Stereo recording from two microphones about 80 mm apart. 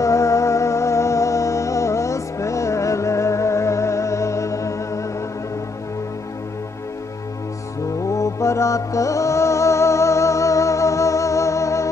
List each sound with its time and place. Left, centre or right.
0.0 s music: left
8.1 s music: left